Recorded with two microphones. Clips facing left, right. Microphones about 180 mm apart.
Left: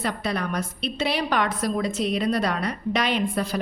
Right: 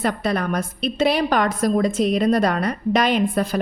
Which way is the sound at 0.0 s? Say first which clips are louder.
Right 5 dB; 50° right (ahead or behind).